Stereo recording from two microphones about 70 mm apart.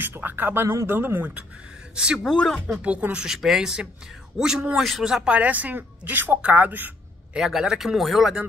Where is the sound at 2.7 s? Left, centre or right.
Centre.